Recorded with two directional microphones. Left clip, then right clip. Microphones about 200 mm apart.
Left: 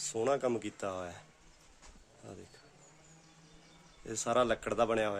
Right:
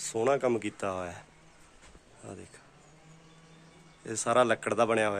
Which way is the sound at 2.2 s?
Centre (ahead or behind).